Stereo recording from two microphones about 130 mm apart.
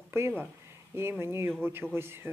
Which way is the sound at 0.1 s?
15° right (ahead or behind).